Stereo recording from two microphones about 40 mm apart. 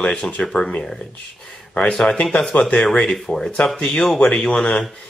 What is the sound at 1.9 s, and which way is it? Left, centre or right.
Speech, centre.